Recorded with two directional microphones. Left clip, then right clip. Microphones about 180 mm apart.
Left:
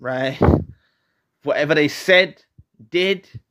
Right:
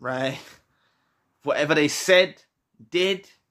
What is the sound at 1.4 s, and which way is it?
Speech, 15° left (ahead or behind).